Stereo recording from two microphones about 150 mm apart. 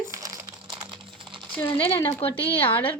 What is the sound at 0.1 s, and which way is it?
Crumpling, 20° right (ahead or behind).